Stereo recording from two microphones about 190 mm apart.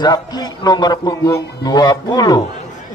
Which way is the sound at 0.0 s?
20° left (ahead or behind).